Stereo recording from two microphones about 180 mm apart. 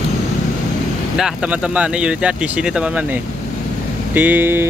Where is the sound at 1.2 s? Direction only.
5° right (ahead or behind).